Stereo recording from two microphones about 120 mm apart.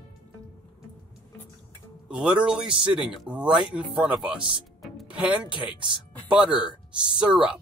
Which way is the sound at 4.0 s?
10° right (ahead or behind).